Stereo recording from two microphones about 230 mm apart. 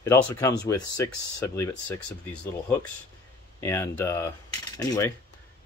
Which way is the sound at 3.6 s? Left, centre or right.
Centre.